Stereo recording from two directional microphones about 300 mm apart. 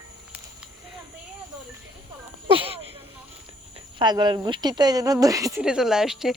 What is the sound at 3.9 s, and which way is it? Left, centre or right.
Speech, centre.